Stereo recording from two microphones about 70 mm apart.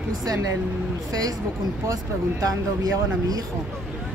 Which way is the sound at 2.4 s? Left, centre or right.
Right.